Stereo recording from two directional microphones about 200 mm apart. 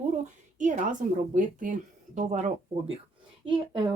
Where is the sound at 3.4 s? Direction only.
25° right (ahead or behind).